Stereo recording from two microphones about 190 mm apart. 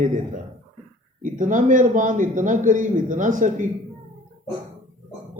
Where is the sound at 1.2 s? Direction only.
40° right (ahead or behind).